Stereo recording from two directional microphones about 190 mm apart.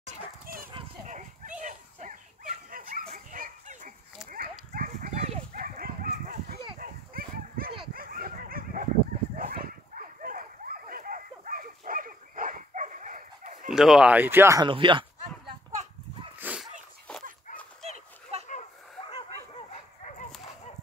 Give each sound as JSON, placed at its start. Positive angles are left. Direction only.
{"t": 0.0, "sound": "dog", "side_deg": -45}
{"t": 1.0, "sound": "goat", "side_deg": -40}
{"t": 1.6, "sound": "dog", "side_deg": -40}
{"t": 6.8, "sound": "a sound", "side_deg": -50}
{"t": 7.9, "sound": "dog", "side_deg": -50}
{"t": 13.7, "sound": "speech", "side_deg": -5}
{"t": 16.3, "sound": "sneeze", "side_deg": -5}
{"t": 17.1, "sound": "dog", "side_deg": 5}
{"t": 17.8, "sound": "children playing", "side_deg": -35}
{"t": 18.5, "sound": "a sound", "side_deg": 35}
{"t": 19.1, "sound": "dog", "side_deg": 30}